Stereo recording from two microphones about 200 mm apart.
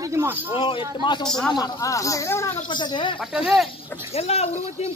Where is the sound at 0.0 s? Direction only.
15° right (ahead or behind).